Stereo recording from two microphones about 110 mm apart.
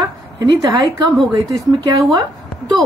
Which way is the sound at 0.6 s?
30° right (ahead or behind).